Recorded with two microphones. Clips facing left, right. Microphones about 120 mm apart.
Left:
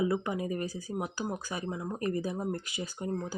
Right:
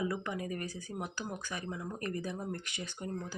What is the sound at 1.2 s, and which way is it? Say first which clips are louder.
Speech: left 5 dB; 35° left (ahead or behind).